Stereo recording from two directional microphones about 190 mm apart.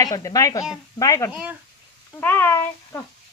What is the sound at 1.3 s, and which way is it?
Speech, 5° right (ahead or behind).